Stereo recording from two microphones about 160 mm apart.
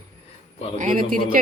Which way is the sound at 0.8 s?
55° right (ahead or behind).